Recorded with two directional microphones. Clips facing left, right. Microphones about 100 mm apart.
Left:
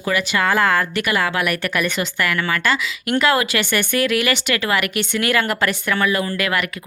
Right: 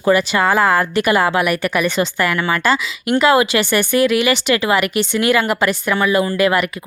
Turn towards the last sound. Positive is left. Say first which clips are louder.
# right 6 dB
turn(degrees=-25)  # may be behind; listen again after turning